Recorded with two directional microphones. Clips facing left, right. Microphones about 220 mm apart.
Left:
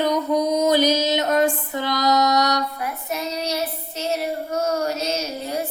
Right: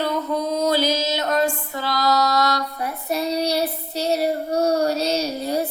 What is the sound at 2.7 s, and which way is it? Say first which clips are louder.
Child singing: right 3 dB; 35° right (ahead or behind).